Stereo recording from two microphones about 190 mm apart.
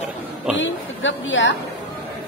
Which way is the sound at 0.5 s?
80° left.